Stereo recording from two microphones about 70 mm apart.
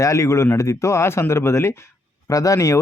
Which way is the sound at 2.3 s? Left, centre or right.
Left.